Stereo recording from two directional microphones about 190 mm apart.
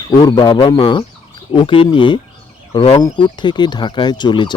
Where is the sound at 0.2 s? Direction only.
20° left (ahead or behind).